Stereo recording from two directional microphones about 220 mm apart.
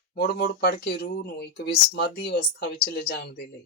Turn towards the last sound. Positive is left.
turn(degrees=45)  # may be behind; listen again after turning